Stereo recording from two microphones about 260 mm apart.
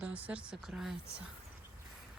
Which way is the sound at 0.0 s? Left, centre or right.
Centre.